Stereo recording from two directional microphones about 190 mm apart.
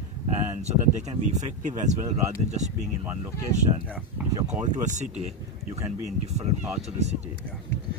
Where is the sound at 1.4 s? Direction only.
40° right (ahead or behind).